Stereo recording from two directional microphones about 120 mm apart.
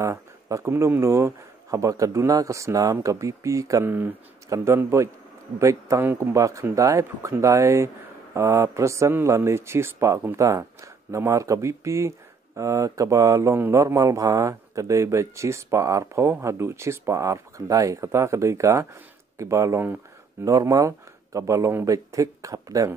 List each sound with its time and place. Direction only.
0.0 s speech: 25° right (ahead or behind)